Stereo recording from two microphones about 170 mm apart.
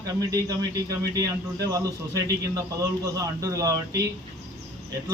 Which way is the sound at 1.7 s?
20° right (ahead or behind).